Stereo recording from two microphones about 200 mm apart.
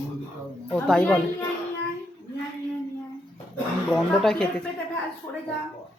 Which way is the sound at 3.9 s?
Centre (ahead or behind).